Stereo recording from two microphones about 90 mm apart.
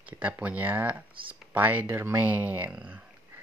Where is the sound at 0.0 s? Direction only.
15° right (ahead or behind).